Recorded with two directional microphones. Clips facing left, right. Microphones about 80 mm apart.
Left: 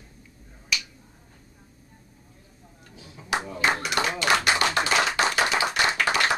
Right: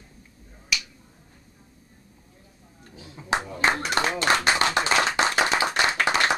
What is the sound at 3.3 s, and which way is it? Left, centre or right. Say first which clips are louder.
Clapping: right 1 dB; right.